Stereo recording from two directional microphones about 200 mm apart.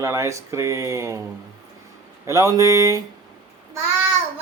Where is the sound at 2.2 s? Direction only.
15° right (ahead or behind).